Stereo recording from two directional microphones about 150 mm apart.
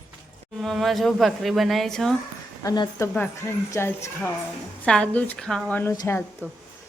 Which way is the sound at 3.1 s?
15° left (ahead or behind).